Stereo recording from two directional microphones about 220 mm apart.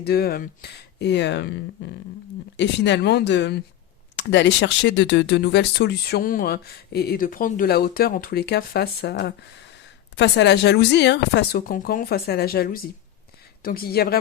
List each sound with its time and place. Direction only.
0.0 s speech: 45° left (ahead or behind)